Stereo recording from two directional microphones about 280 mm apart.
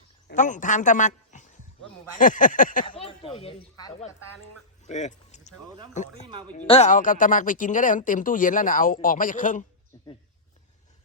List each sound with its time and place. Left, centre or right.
0.3 s speech: left
4.9 s a sound: left
6.0 s speech: left